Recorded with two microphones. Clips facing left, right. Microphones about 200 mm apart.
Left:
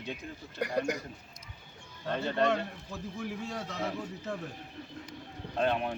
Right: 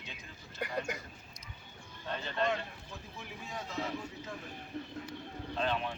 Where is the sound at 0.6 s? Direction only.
45° left (ahead or behind).